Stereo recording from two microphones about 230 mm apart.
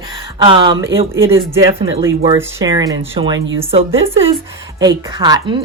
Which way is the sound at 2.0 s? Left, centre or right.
Centre.